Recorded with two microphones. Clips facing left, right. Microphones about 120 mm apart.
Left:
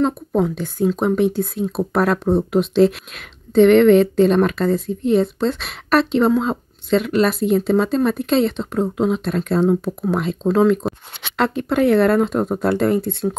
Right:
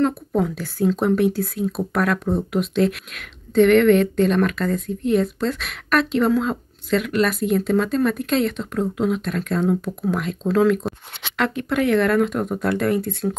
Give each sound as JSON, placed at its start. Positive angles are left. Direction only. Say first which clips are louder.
{"t": 0.0, "sound": "a woman's voice", "louder": "left 2 dB", "side_deg": 20}